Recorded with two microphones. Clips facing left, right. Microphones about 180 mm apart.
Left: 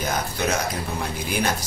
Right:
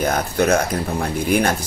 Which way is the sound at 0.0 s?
60° right (ahead or behind).